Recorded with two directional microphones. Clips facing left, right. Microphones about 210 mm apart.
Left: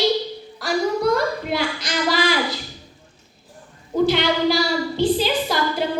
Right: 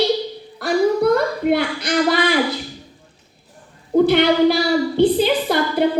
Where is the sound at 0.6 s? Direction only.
55° right (ahead or behind).